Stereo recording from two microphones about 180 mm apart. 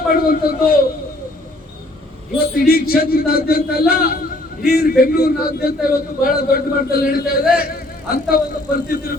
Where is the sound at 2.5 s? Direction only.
55° left (ahead or behind).